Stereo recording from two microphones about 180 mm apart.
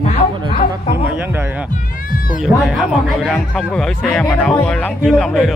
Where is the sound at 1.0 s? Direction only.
10° right (ahead or behind).